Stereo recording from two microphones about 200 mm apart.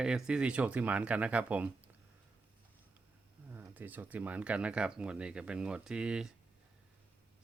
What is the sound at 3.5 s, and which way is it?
Speech, 10° right (ahead or behind).